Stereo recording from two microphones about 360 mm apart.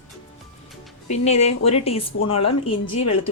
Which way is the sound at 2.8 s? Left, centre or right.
Left.